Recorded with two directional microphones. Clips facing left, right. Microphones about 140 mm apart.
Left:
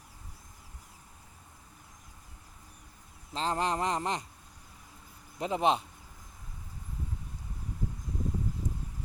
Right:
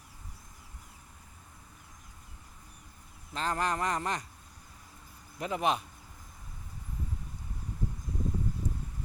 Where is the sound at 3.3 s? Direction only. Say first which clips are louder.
Left 1 dB; 25° left (ahead or behind).